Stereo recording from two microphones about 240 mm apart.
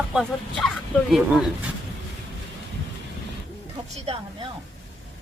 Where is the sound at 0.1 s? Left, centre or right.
Centre.